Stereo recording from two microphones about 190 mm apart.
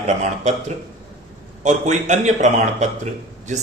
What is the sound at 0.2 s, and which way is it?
Speech, 40° right (ahead or behind).